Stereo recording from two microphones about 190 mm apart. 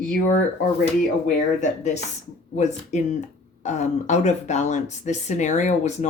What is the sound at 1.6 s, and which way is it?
Speech, 40° left (ahead or behind).